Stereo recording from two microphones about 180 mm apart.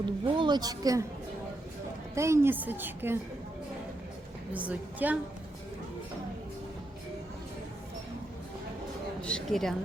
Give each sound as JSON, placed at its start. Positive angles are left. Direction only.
{"t": 0.0, "sound": "speech", "side_deg": -25}
{"t": 2.1, "sound": "a woman's voice", "side_deg": -15}
{"t": 4.5, "sound": "a woman's voice", "side_deg": -10}
{"t": 9.2, "sound": "speech", "side_deg": 5}